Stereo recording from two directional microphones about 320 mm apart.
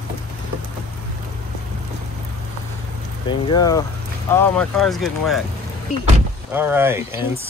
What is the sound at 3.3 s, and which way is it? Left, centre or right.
Speech, centre.